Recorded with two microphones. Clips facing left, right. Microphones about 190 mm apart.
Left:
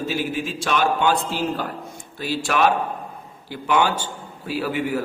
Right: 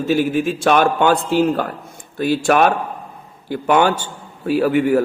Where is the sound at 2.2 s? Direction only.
50° right (ahead or behind).